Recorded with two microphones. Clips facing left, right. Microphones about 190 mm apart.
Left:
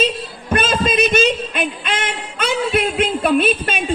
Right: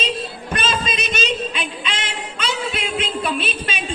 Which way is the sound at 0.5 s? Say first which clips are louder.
Left 7 dB; 50° left (ahead or behind).